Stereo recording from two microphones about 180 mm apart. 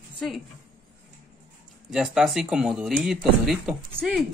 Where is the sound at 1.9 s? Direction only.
Centre (ahead or behind).